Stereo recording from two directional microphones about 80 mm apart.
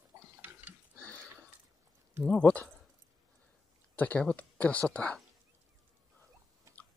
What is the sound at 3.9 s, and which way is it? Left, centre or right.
Speech, centre.